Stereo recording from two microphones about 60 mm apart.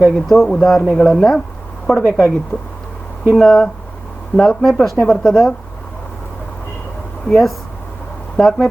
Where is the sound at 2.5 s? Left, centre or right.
Left.